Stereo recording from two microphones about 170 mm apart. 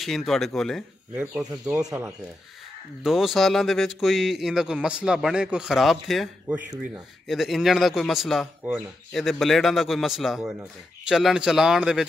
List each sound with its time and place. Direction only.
0.0 s speech: centre (ahead or behind)
1.4 s speech: 20° right (ahead or behind)
3.0 s speech: centre (ahead or behind)